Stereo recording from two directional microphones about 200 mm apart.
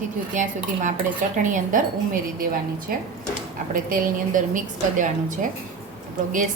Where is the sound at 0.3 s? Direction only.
40° right (ahead or behind).